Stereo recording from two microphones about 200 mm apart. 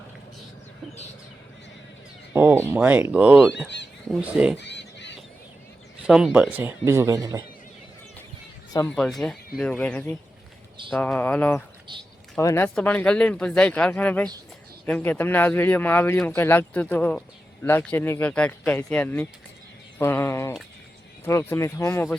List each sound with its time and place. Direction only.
2.3 s speech: 10° right (ahead or behind)
4.5 s goose: 60° left (ahead or behind)
6.0 s speech: 5° right (ahead or behind)
9.0 s speech: centre (ahead or behind)